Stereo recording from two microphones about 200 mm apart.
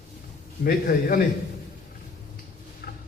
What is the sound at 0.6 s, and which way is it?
Speech, 50° left (ahead or behind).